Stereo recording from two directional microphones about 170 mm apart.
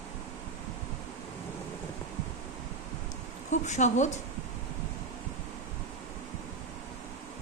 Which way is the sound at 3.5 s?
45° left (ahead or behind).